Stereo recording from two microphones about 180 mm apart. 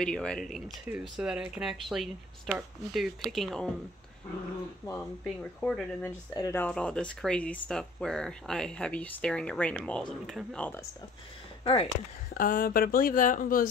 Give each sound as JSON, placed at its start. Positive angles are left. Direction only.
{"t": 0.0, "sound": "speech", "side_deg": 5}
{"t": 5.4, "sound": "speech", "side_deg": 5}
{"t": 11.6, "sound": "speech", "side_deg": 30}
{"t": 12.4, "sound": "speech", "side_deg": 50}